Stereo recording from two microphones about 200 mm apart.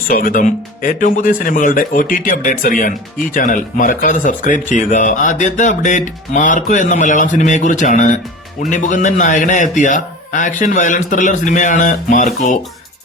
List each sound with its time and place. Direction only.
0.1 s speech: 45° left (ahead or behind)